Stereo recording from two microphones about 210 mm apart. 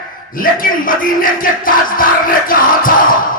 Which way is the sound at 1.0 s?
40° left (ahead or behind).